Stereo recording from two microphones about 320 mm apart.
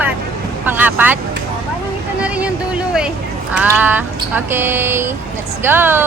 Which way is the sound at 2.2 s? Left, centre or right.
Centre.